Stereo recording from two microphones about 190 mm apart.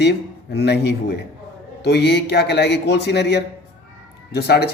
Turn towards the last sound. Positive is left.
turn(degrees=60)  # may be behind; listen again after turning